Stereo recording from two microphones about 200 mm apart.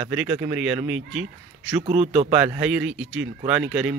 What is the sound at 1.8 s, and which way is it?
Speech, 35° right (ahead or behind).